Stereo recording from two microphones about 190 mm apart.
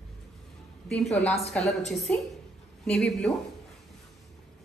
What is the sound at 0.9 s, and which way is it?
Speech, centre (ahead or behind).